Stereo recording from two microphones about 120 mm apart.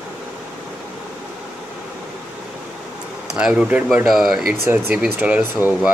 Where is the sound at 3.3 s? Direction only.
5° right (ahead or behind).